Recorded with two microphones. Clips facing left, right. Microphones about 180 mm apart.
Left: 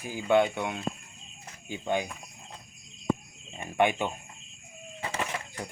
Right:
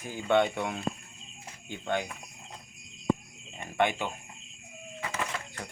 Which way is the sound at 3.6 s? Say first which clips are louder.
Left 2 dB; 15° left (ahead or behind).